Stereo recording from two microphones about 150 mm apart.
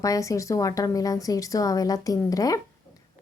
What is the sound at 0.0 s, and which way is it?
A woman's voice, 20° left (ahead or behind).